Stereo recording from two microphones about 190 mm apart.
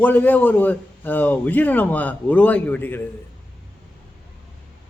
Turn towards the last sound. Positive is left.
turn(degrees=10)  # may be behind; listen again after turning